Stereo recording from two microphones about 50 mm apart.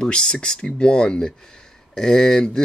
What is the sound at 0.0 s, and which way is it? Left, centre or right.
Speech, centre.